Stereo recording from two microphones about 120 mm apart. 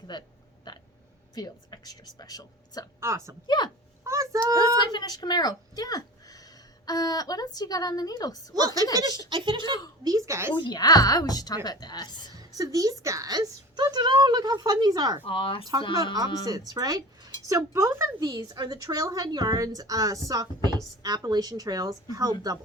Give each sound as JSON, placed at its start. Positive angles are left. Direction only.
{"t": 0.1, "sound": "a sound", "side_deg": 40}
{"t": 1.4, "sound": "a woman's voice", "side_deg": 35}
{"t": 3.0, "sound": "speech", "side_deg": -20}
{"t": 3.4, "sound": "a woman's voice", "side_deg": 35}
{"t": 4.0, "sound": "speech", "side_deg": -25}
{"t": 4.9, "sound": "a woman's voice", "side_deg": 35}
{"t": 8.5, "sound": "a woman's voice", "side_deg": -30}
{"t": 10.0, "sound": "speech", "side_deg": -30}
{"t": 10.5, "sound": "a woman's voice", "side_deg": 40}
{"t": 12.3, "sound": "a woman's voice", "side_deg": -30}
{"t": 15.3, "sound": "speech", "side_deg": 45}
{"t": 16.1, "sound": "a woman's voice", "side_deg": -30}
{"t": 18.2, "sound": "a woman's voice", "side_deg": -30}